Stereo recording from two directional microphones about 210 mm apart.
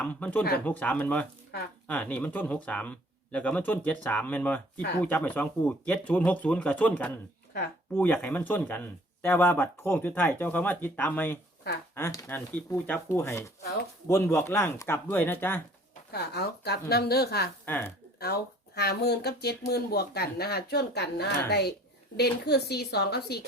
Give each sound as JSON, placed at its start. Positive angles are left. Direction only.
{"t": 0.0, "sound": "speech", "side_deg": 5}
{"t": 13.6, "sound": "speech", "side_deg": 50}
{"t": 14.1, "sound": "speech", "side_deg": 10}
{"t": 16.1, "sound": "speech", "side_deg": 50}
{"t": 17.7, "sound": "speech", "side_deg": 10}
{"t": 18.2, "sound": "speech", "side_deg": 50}